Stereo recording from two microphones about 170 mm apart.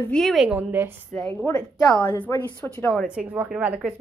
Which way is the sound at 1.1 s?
10° left (ahead or behind).